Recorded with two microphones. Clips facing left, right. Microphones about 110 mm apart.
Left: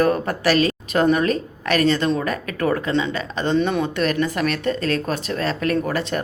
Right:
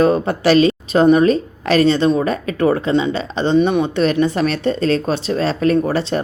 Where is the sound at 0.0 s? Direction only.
25° right (ahead or behind).